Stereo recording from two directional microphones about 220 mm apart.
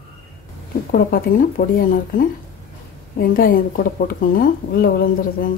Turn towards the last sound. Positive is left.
turn(degrees=40)  # may be behind; listen again after turning